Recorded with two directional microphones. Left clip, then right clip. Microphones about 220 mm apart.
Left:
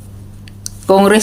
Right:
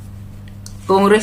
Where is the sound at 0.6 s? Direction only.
40° left (ahead or behind).